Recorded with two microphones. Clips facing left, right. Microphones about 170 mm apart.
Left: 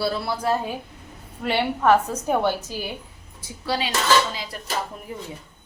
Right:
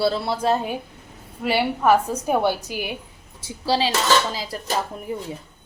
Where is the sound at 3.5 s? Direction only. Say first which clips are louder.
Right 5 dB; 30° right (ahead or behind).